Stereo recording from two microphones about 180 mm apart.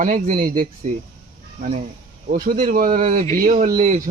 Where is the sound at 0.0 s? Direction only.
45° right (ahead or behind).